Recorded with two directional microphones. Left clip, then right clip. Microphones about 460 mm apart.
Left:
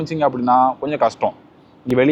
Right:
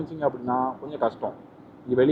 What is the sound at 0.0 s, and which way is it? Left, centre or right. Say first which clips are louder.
A man's voice: left 9 dB; left.